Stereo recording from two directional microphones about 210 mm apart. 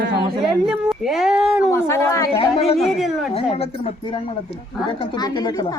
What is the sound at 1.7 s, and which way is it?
Speech, 15° left (ahead or behind).